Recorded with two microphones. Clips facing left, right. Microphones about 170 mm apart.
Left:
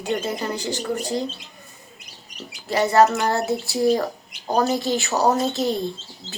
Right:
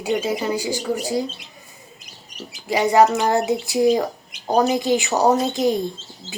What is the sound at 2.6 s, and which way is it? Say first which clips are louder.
Speech: right 1 dB; 15° right (ahead or behind).